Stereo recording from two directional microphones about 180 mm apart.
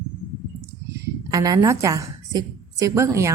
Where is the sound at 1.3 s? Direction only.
20° right (ahead or behind).